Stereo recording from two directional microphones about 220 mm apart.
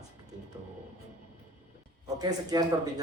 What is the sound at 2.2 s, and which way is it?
Speech, 15° right (ahead or behind).